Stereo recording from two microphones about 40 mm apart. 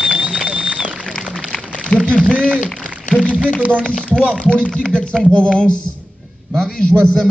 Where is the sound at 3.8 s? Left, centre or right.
Left.